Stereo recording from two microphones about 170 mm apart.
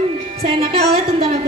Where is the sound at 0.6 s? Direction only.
35° right (ahead or behind).